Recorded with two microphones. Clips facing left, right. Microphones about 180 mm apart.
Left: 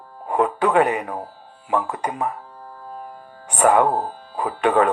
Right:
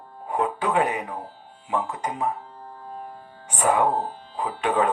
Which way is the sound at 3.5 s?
65° left (ahead or behind).